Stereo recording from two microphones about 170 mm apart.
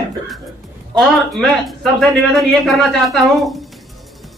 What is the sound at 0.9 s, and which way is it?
A man's voice, centre (ahead or behind).